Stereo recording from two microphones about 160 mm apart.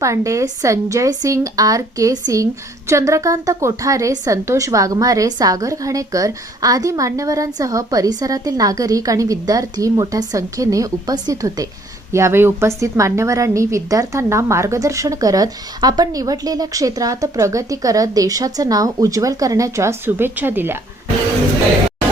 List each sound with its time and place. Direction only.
0.0 s a woman's voice: 20° right (ahead or behind)